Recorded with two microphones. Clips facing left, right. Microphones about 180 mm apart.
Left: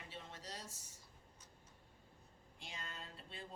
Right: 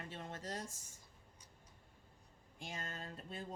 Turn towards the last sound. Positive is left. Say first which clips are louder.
# right 6 dB
turn(degrees=-45)  # may be behind; listen again after turning